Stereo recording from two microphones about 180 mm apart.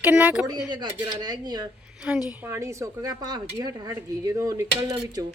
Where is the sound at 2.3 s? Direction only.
10° right (ahead or behind).